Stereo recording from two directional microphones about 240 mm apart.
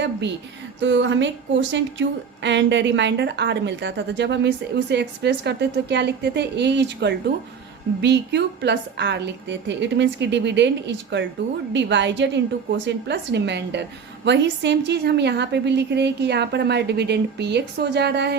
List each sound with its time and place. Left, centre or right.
0.8 s a woman's voice: right